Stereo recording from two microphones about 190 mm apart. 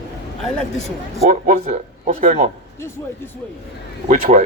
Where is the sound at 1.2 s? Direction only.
40° right (ahead or behind).